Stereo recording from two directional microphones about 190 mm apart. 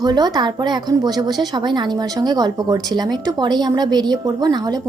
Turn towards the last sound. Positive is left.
turn(degrees=-20)  # may be behind; listen again after turning